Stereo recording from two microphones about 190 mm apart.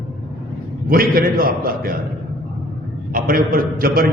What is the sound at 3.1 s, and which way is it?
Speech, 50° right (ahead or behind).